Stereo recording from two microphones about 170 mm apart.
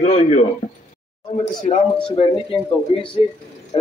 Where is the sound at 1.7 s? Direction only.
45° left (ahead or behind).